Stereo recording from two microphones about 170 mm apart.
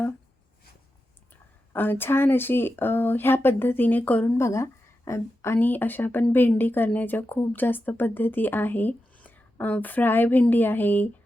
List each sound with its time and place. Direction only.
1.3 s speech: 10° left (ahead or behind)